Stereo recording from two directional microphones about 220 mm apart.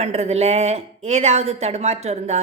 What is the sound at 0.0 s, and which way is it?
A woman's voice, 30° right (ahead or behind).